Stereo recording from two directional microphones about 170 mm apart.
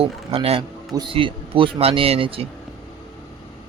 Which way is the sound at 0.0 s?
35° right (ahead or behind).